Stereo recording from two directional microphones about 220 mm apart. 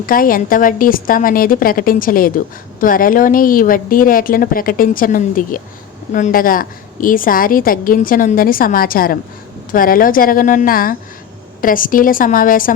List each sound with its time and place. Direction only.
0.0 s a woman's voice: 40° left (ahead or behind)